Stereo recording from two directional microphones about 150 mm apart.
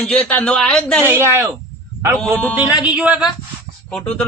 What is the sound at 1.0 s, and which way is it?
Speech, 15° right (ahead or behind).